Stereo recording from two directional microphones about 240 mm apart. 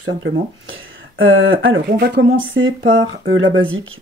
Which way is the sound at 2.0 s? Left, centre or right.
Right.